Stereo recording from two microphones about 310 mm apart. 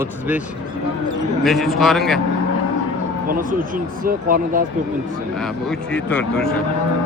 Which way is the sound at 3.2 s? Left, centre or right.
Right.